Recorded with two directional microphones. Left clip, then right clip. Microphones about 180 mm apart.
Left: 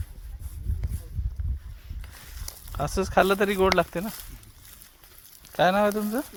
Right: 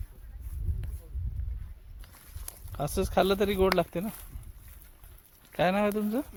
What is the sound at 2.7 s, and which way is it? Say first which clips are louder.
Speech: left 4 dB; 5° right (ahead or behind).